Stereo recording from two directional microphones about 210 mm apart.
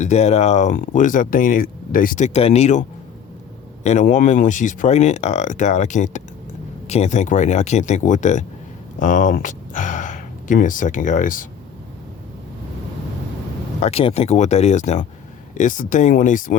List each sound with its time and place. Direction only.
0.0 s speech: 30° left (ahead or behind)
3.8 s speech: 35° left (ahead or behind)
13.7 s speech: 30° left (ahead or behind)